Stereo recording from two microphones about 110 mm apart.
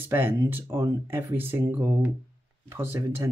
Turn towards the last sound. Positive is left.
turn(degrees=-20)  # may be behind; listen again after turning